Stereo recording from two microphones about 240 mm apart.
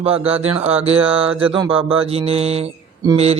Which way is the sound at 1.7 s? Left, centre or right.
Right.